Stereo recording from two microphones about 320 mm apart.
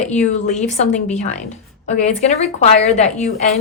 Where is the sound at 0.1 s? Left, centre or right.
Left.